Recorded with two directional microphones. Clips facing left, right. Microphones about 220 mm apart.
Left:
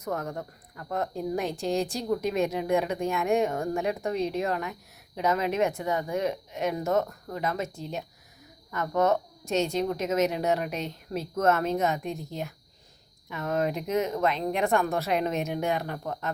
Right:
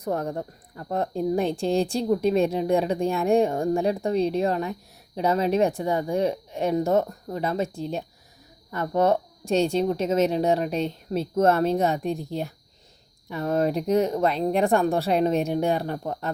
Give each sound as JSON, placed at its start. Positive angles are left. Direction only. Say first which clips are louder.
{"t": 0.0, "sound": "a woman's voice", "louder": "right 5 dB", "side_deg": -30}